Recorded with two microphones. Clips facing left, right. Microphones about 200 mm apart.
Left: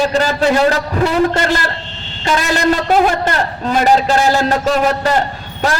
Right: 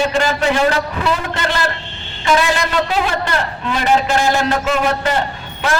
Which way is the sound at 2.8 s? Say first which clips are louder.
Left 6 dB; 45° left (ahead or behind).